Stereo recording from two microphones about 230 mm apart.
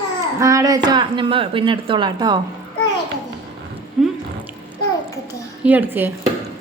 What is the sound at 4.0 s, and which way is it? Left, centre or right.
Drip, centre.